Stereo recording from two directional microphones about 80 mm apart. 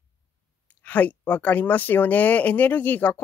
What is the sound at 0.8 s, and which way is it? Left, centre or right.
Speech, left.